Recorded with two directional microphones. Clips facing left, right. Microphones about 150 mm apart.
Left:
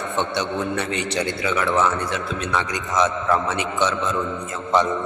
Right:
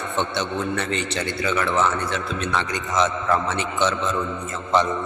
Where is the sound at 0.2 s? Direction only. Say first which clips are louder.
Left 1 dB; 15° left (ahead or behind).